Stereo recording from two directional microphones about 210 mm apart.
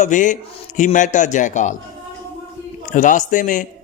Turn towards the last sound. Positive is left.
turn(degrees=35)  # may be behind; listen again after turning